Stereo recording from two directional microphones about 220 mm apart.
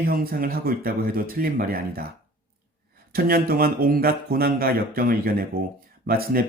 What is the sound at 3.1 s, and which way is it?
Speech, 45° right (ahead or behind).